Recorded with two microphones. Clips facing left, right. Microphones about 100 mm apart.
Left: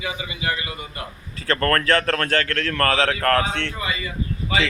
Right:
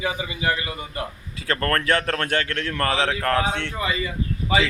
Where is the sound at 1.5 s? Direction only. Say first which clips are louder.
Left 2 dB; 15° right (ahead or behind).